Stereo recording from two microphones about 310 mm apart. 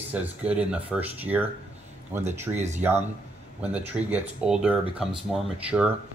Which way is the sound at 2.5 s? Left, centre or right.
Right.